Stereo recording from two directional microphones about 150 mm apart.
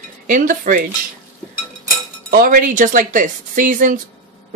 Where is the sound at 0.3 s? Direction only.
65° right (ahead or behind).